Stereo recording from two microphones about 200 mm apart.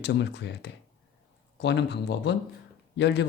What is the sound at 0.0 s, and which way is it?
Speech, 60° left (ahead or behind).